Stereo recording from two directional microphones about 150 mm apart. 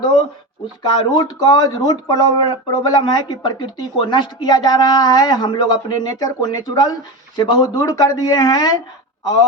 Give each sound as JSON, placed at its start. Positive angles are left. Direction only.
{"t": 0.8, "sound": "a man's voice", "side_deg": 30}